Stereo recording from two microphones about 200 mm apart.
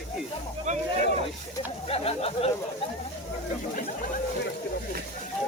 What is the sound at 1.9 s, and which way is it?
Speech, 30° left (ahead or behind).